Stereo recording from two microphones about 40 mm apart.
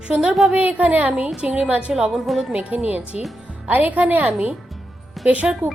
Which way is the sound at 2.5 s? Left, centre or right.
Right.